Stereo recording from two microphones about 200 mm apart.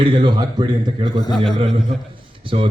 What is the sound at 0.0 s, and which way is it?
Speech, 25° right (ahead or behind).